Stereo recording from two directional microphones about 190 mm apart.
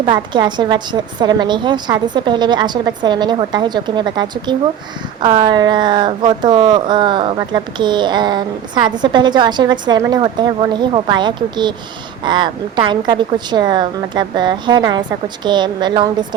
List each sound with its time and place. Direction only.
0.0 s speech: 25° right (ahead or behind)